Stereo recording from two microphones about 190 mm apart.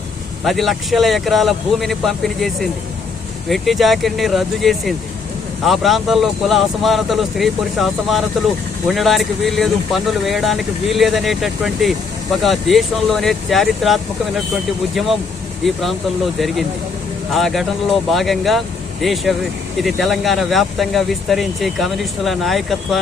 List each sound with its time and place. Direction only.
0.4 s speech: centre (ahead or behind)
17.3 s speech: centre (ahead or behind)